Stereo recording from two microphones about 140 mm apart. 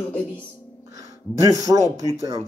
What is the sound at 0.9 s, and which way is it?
Speech, 25° right (ahead or behind).